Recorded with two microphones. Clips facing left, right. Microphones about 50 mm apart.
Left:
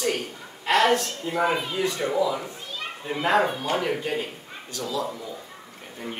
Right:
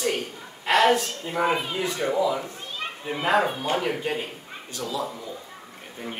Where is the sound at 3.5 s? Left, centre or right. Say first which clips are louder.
Even; right.